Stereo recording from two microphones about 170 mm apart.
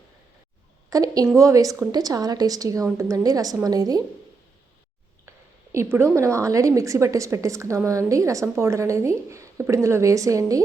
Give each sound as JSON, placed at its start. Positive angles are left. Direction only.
{"t": 0.9, "sound": "a woman's voice", "side_deg": -20}
{"t": 5.7, "sound": "a woman's voice", "side_deg": -15}